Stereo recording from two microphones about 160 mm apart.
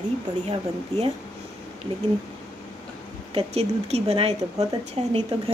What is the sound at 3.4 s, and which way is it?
A woman's voice, 40° right (ahead or behind).